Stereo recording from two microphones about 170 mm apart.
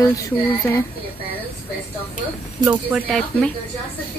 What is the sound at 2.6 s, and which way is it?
Speech, 10° right (ahead or behind).